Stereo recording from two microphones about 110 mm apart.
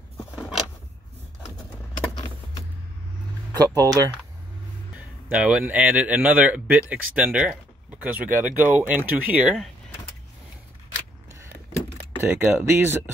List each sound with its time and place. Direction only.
3.6 s speech: 35° right (ahead or behind)
4.9 s a man's voice: 10° right (ahead or behind)
12.2 s speech: 20° right (ahead or behind)